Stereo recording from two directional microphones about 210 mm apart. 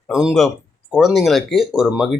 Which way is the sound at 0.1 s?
5° right (ahead or behind).